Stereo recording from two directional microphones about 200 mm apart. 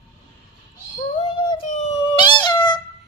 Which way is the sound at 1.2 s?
25° left (ahead or behind).